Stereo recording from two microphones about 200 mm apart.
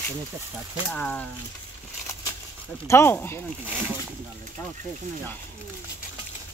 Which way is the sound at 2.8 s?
15° left (ahead or behind).